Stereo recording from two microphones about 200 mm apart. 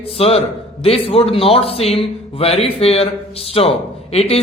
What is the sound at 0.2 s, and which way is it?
A man's voice, 30° left (ahead or behind).